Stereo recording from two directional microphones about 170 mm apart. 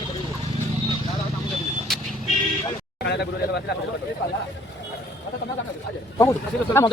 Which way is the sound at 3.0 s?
80° left.